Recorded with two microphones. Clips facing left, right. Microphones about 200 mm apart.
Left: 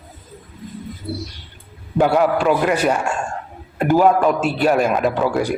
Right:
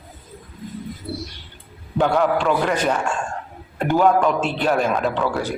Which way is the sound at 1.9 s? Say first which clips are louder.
Left 3 dB; 10° left (ahead or behind).